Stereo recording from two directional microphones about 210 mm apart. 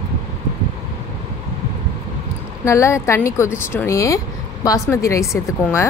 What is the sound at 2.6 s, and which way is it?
Speech, 15° left (ahead or behind).